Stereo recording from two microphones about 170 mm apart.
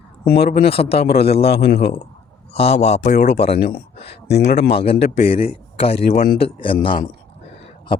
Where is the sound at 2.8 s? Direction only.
40° left (ahead or behind).